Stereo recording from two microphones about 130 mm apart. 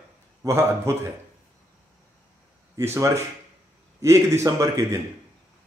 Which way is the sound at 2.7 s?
20° right (ahead or behind).